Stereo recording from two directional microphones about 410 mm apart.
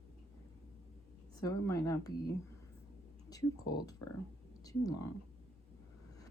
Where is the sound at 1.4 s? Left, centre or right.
Centre.